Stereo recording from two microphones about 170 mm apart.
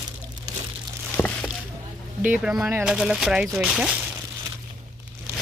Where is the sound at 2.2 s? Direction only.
5° right (ahead or behind).